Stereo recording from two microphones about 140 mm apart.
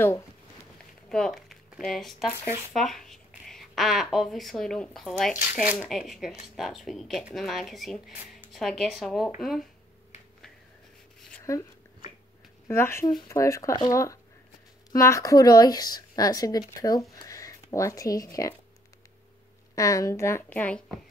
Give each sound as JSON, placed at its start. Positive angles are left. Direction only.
{"t": 1.0, "sound": "speech", "side_deg": 5}
{"t": 2.3, "sound": "speech", "side_deg": -20}
{"t": 2.7, "sound": "speech", "side_deg": 0}
{"t": 5.4, "sound": "speech", "side_deg": -10}
{"t": 5.9, "sound": "speech", "side_deg": 0}
{"t": 12.6, "sound": "speech", "side_deg": 20}
{"t": 19.7, "sound": "speech", "side_deg": 25}